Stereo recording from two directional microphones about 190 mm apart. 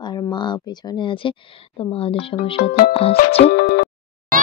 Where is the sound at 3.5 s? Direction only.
55° left (ahead or behind).